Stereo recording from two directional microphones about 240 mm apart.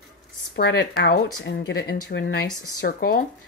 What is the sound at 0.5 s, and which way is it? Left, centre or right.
Speech, left.